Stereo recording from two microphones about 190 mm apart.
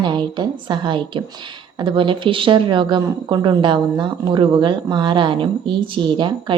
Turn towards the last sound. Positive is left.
turn(degrees=-25)  # may be behind; listen again after turning